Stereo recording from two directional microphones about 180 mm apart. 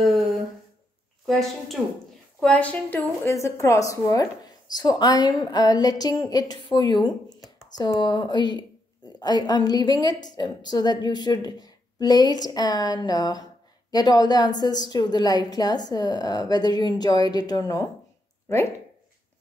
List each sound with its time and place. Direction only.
2.4 s a woman's voice: 5° left (ahead or behind)